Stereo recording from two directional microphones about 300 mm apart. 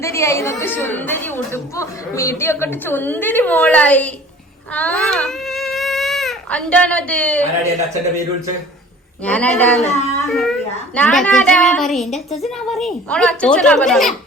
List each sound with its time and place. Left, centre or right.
0.0 s speech: centre
9.2 s a child's voice: centre
9.8 s speech: left
10.3 s a child's voice: centre